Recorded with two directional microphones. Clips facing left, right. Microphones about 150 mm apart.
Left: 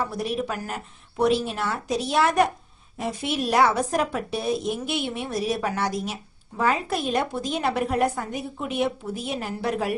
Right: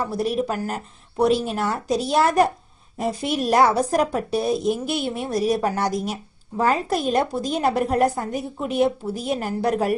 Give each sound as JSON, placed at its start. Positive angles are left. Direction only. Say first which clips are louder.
{"t": 0.2, "sound": "a woman's voice", "louder": "right 5 dB", "side_deg": -35}